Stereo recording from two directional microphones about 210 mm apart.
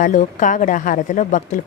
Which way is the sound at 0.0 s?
40° left (ahead or behind).